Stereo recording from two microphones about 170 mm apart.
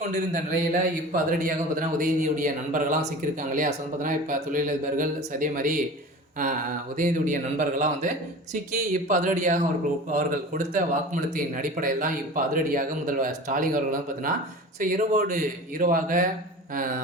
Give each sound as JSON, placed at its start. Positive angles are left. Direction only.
{"t": 0.0, "sound": "a man's voice", "side_deg": -45}
{"t": 6.9, "sound": "a man's voice", "side_deg": -50}